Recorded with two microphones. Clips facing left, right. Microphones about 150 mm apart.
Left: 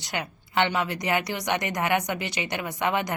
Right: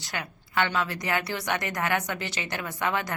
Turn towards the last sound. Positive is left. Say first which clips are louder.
# left 3 dB
turn(degrees=20)  # may be behind; listen again after turning